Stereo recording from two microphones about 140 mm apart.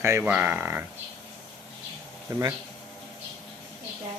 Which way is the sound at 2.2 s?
20° right (ahead or behind).